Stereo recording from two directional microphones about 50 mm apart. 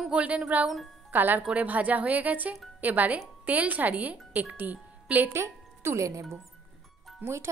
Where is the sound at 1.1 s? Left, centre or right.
Right.